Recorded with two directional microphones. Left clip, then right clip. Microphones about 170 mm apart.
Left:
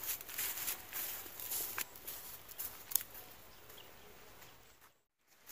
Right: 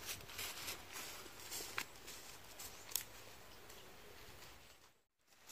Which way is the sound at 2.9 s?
5° left (ahead or behind).